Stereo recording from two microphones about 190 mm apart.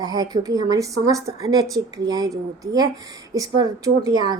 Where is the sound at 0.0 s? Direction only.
20° right (ahead or behind).